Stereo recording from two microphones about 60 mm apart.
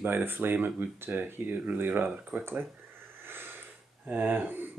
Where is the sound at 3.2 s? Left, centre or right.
Right.